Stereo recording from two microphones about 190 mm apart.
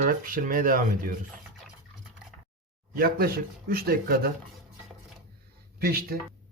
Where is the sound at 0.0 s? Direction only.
45° right (ahead or behind).